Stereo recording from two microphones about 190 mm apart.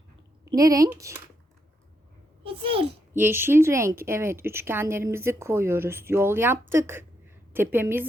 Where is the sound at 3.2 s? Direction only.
10° right (ahead or behind).